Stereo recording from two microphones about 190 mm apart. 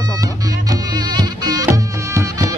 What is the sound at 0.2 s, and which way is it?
Music, 20° right (ahead or behind).